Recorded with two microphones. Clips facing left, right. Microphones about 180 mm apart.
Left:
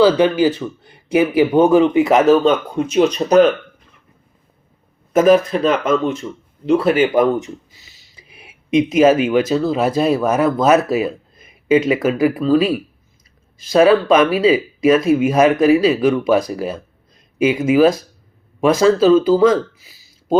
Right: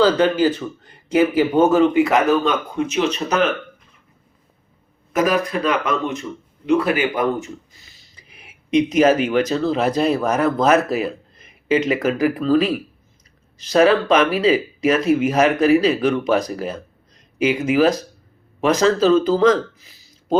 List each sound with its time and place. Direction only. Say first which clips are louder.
0.0 s speech: left 3 dB; 10° left (ahead or behind); by 3.5 s 35° left (ahead or behind)
5.1 s speech: left 7 dB; 25° left (ahead or behind)
7.7 s a sound: left 1 dB; 5° left (ahead or behind)
9.0 s speech: left 4 dB; 20° left (ahead or behind)